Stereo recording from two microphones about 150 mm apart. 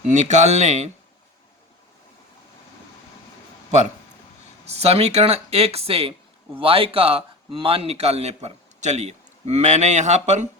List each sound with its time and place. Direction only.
0.1 s speech: 50° right (ahead or behind)
4.6 s speech: 45° right (ahead or behind)